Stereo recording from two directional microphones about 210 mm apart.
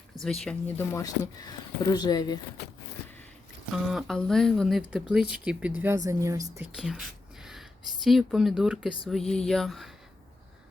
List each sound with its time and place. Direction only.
0.2 s speech: centre (ahead or behind)
0.9 s speech: 15° left (ahead or behind)
3.8 s speech: centre (ahead or behind)
6.7 s speech: centre (ahead or behind)